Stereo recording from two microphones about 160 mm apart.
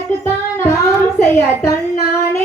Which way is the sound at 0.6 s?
15° left (ahead or behind).